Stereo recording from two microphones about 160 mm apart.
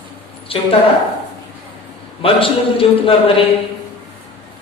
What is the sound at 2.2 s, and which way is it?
A man's voice, 35° left (ahead or behind).